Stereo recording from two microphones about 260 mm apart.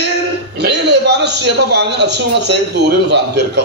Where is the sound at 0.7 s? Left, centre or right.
Right.